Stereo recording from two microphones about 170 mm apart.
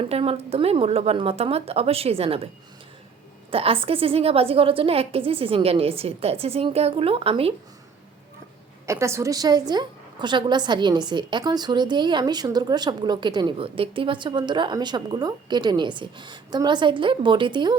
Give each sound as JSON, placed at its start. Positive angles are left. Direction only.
{"t": 0.0, "sound": "a woman's voice", "side_deg": -35}
{"t": 3.5, "sound": "a woman's voice", "side_deg": -35}
{"t": 8.9, "sound": "a woman's voice", "side_deg": -15}